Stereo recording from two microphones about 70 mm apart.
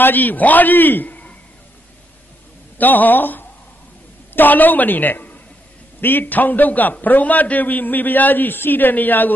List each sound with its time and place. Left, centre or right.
0.0 s a man's voice: left
2.8 s a man's voice: left